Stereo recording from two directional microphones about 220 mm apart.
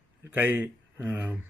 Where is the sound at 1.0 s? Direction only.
10° right (ahead or behind).